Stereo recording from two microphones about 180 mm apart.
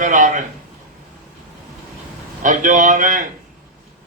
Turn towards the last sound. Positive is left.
turn(degrees=-45)  # may be behind; listen again after turning